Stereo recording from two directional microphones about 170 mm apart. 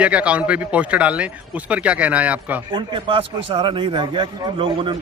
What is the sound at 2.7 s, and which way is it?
Speech, 30° right (ahead or behind).